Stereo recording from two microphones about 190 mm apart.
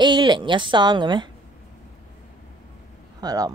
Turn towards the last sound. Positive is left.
turn(degrees=-20)  # may be behind; listen again after turning